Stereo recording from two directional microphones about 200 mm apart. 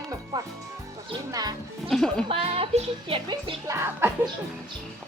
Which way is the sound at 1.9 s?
5° left (ahead or behind).